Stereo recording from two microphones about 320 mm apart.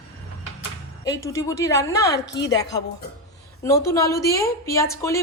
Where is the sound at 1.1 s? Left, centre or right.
Centre.